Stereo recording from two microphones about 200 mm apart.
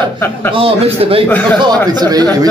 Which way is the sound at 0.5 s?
30° right (ahead or behind).